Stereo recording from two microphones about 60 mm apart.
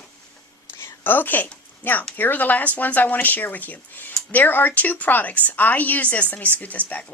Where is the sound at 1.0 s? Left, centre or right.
Left.